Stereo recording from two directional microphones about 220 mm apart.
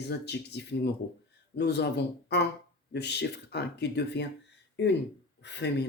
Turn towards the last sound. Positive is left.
turn(degrees=50)  # may be behind; listen again after turning